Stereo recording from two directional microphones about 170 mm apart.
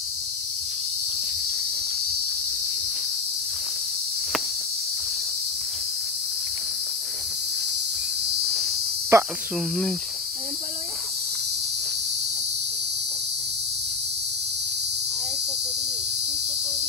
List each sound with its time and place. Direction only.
9.1 s speech: 15° right (ahead or behind)